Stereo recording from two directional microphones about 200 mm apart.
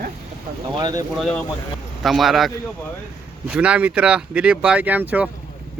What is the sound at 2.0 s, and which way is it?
Speech, centre (ahead or behind).